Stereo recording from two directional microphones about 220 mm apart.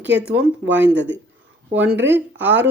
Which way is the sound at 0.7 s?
55° right (ahead or behind).